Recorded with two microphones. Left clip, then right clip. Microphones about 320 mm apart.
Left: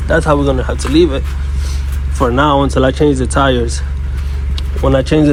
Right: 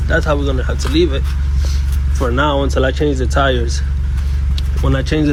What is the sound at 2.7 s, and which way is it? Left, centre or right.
Speech, centre.